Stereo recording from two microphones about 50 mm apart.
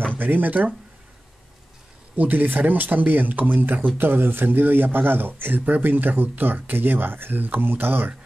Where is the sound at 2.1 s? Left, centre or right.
Right.